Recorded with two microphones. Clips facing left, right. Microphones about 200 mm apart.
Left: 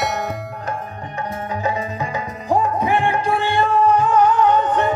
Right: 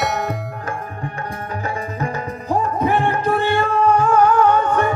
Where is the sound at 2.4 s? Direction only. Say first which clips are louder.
Left 1 dB; 15° left (ahead or behind).